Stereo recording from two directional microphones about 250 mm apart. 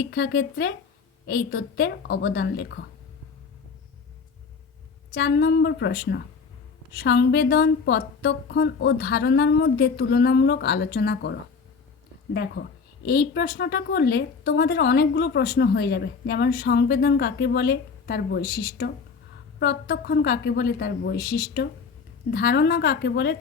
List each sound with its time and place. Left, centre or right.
0.0 s a woman's voice: left
5.1 s a woman's voice: left
13.1 s a woman's voice: left